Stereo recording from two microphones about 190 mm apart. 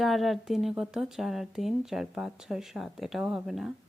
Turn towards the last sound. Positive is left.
turn(degrees=0)  # may be behind; listen again after turning